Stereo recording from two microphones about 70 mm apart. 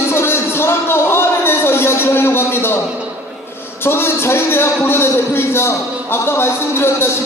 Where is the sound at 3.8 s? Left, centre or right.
Left.